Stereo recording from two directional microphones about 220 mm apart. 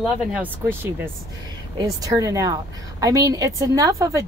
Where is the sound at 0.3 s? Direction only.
10° right (ahead or behind).